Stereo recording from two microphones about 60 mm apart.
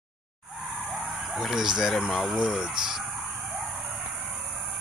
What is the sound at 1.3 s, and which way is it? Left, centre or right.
Speech, centre.